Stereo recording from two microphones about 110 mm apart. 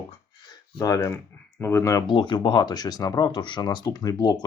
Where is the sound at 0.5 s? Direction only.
30° left (ahead or behind).